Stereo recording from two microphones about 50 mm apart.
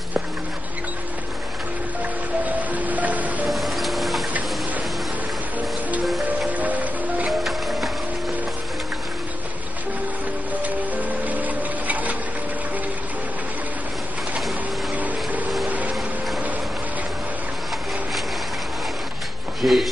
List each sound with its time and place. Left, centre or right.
2.4 s music: right
3.4 s music: centre
6.5 s music: right
7.2 s music: centre
10.5 s music: right
15.0 s vehicle: right
19.6 s a sound: centre